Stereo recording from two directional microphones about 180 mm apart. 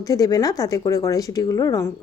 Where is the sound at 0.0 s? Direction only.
20° left (ahead or behind).